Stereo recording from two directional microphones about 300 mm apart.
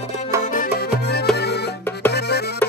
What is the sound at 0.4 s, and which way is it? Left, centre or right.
Music, left.